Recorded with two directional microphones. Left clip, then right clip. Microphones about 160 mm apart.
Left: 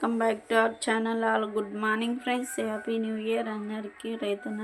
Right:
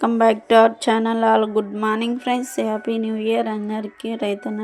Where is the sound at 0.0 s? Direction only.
45° right (ahead or behind).